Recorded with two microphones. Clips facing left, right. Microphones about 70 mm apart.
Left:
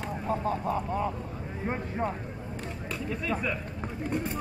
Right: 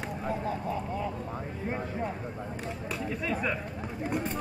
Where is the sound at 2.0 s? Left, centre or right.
Left.